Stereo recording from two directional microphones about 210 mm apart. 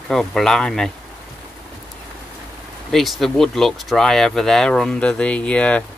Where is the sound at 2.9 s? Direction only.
Centre (ahead or behind).